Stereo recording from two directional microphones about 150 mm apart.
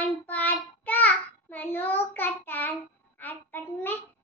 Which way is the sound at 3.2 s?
10° left (ahead or behind).